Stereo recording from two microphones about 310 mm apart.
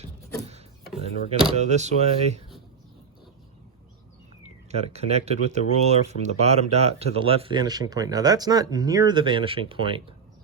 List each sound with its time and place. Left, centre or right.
1.0 s speech: right
4.7 s speech: centre